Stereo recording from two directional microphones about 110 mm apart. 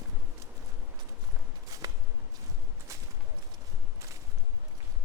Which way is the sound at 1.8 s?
30° right (ahead or behind).